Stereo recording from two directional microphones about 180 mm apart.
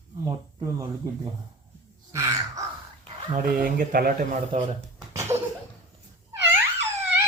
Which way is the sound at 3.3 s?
50° right (ahead or behind).